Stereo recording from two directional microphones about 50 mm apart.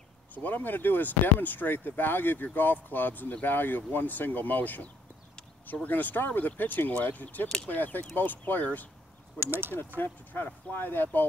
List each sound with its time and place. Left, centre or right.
0.3 s speech: left
9.4 s speech: right
9.9 s speech: left